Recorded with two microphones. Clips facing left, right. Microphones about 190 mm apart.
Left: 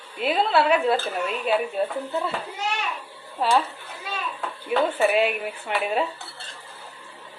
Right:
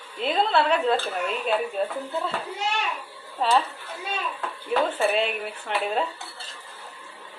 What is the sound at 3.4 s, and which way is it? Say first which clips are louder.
Speech: left 1 dB; 5° left (ahead or behind).